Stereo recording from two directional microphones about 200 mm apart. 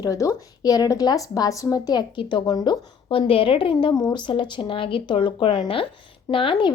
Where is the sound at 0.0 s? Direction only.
15° left (ahead or behind).